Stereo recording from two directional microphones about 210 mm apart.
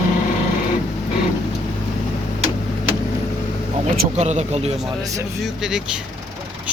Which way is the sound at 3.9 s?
35° right (ahead or behind).